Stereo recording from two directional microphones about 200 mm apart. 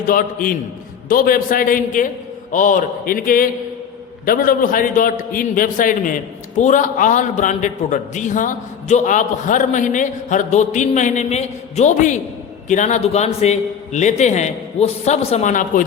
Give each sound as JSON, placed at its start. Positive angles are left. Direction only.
{"t": 0.1, "sound": "a man's voice", "side_deg": 45}